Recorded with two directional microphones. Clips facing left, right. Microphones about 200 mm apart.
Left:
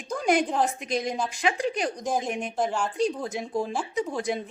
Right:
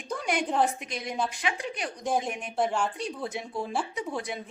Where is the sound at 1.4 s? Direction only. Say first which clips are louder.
Left 6 dB; 35° left (ahead or behind).